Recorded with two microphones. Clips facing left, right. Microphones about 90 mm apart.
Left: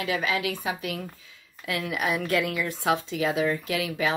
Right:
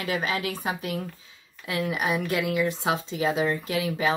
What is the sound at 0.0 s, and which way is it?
Speech, 35° right (ahead or behind).